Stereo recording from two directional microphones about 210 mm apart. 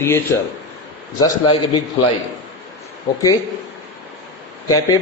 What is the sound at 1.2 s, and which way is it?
Speech, 20° left (ahead or behind).